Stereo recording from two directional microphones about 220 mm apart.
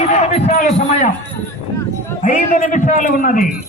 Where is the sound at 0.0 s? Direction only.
30° left (ahead or behind).